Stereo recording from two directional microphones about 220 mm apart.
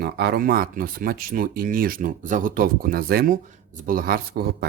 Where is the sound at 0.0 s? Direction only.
45° right (ahead or behind).